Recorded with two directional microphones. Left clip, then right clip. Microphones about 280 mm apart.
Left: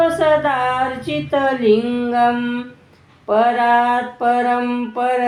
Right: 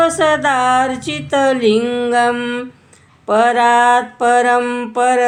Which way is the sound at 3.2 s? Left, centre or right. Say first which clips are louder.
Right 3 dB; right.